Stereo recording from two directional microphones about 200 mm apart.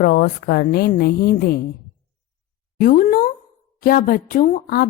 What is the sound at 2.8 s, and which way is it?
Speech, 45° left (ahead or behind).